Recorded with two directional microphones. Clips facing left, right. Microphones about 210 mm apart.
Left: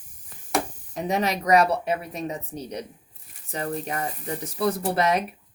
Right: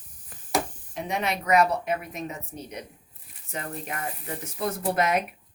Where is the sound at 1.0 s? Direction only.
40° left (ahead or behind).